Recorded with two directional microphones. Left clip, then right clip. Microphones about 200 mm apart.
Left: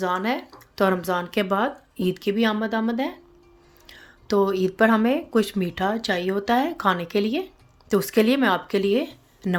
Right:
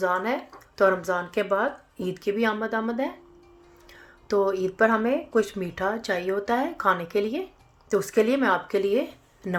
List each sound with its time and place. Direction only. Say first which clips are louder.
0.0 s speech: even; 75° left (ahead or behind)